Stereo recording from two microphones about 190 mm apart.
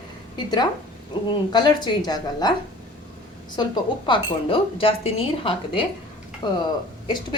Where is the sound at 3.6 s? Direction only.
25° left (ahead or behind).